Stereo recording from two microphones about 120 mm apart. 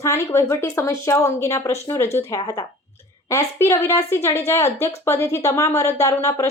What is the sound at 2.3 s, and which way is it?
Speech, 35° left (ahead or behind).